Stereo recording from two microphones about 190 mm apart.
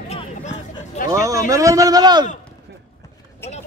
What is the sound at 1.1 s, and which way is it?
Speech, 15° right (ahead or behind).